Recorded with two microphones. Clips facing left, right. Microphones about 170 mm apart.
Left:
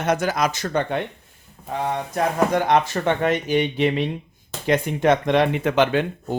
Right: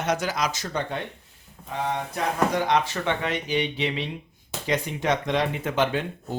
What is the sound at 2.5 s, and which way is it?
Speech, 50° left (ahead or behind).